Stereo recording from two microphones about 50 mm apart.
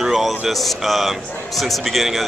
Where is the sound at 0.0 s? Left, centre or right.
Centre.